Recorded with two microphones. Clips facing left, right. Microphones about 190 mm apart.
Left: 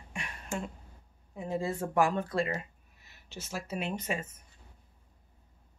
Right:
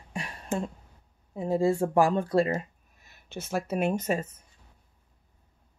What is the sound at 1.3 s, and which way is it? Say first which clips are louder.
Speech: right 8 dB; 35° right (ahead or behind).